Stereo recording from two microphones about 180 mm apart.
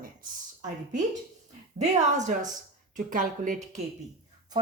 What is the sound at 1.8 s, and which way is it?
Speech, 40° right (ahead or behind).